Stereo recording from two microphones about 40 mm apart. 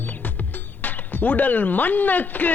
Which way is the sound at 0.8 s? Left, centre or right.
Left.